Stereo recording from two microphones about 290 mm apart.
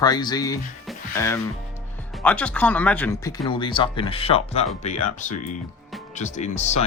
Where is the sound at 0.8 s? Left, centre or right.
Centre.